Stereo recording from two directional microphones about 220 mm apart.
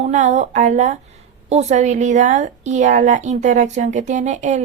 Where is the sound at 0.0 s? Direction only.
35° right (ahead or behind).